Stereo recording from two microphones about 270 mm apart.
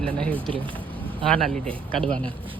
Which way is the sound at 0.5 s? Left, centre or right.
Centre.